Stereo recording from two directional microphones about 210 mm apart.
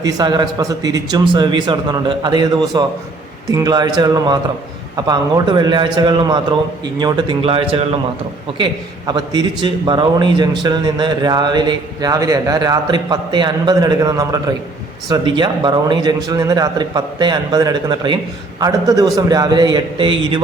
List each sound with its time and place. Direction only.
0.0 s a man's voice: 20° right (ahead or behind)